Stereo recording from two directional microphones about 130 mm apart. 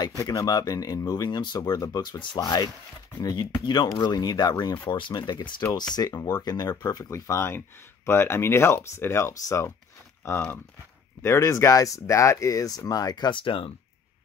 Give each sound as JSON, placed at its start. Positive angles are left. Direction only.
{"t": 0.0, "sound": "speech", "side_deg": 30}